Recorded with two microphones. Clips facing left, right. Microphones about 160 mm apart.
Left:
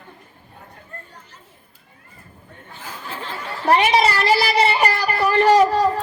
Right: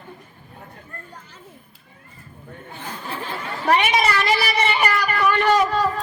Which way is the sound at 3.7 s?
30° left (ahead or behind).